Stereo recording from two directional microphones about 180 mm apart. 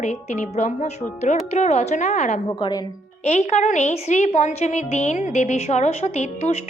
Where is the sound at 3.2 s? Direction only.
40° left (ahead or behind).